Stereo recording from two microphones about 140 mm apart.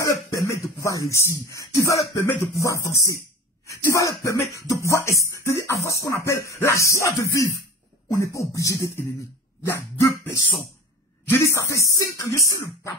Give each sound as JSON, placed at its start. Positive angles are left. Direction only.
{"t": 0.0, "sound": "music", "side_deg": 25}